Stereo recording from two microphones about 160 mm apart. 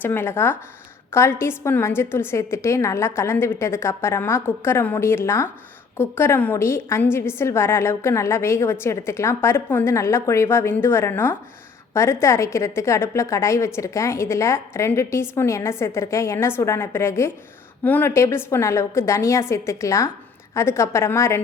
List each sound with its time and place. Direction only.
0.0 s a woman's voice: 15° left (ahead or behind)